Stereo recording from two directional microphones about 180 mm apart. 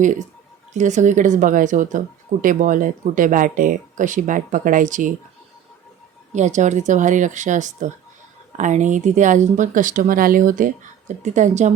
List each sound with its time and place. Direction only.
0.7 s speech: 40° right (ahead or behind)
6.3 s a woman's voice: 40° right (ahead or behind)